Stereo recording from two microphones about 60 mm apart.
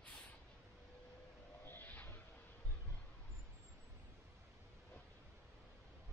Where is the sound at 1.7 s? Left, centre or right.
Left.